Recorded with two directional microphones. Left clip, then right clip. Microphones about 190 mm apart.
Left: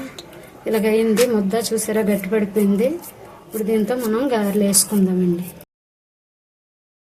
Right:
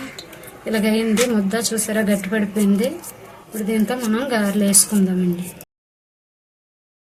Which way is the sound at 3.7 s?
35° left (ahead or behind).